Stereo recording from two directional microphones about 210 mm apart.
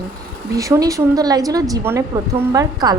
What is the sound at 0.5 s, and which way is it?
A woman's voice, 15° right (ahead or behind).